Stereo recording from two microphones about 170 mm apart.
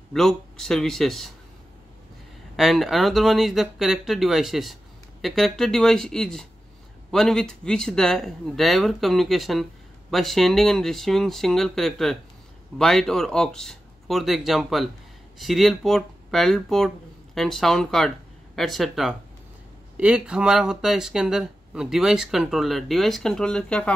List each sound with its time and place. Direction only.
0.1 s speech: centre (ahead or behind)
2.5 s speech: centre (ahead or behind)